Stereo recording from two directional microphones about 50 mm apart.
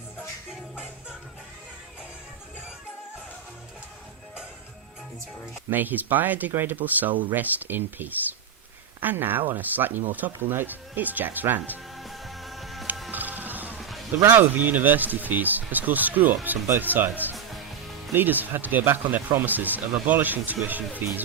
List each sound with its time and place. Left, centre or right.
5.7 s speech: right
11.9 s music: centre
13.1 s music: right
13.7 s a sound: centre
14.3 s speech: right